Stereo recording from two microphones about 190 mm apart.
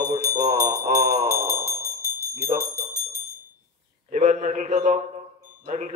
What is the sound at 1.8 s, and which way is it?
Bell, 15° left (ahead or behind).